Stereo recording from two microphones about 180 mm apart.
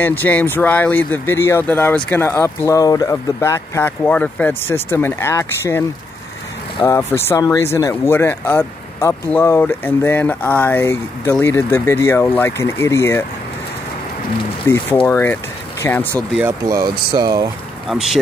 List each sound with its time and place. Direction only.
0.0 s speech: 10° left (ahead or behind)
14.7 s speech: 15° left (ahead or behind)
16.4 s speech: 20° right (ahead or behind)
17.8 s speech: centre (ahead or behind)